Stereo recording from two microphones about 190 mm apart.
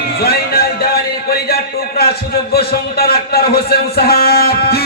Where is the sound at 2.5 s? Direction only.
55° left (ahead or behind).